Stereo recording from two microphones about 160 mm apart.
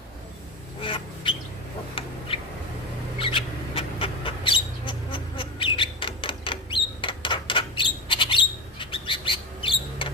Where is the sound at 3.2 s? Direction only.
35° left (ahead or behind).